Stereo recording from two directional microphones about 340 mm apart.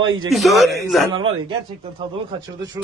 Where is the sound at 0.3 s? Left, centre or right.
Centre.